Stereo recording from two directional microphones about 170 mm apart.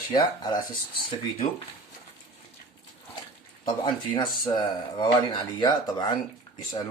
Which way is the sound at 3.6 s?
25° left (ahead or behind).